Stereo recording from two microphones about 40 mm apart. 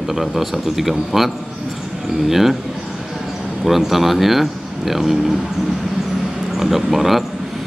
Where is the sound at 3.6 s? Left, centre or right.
Centre.